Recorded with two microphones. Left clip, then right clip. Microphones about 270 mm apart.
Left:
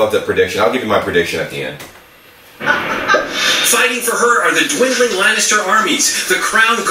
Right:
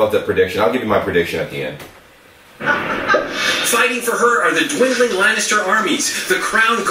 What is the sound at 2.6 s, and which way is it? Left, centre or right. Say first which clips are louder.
Speech: left 2 dB; centre.